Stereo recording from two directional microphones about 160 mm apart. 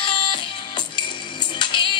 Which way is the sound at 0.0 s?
30° left (ahead or behind).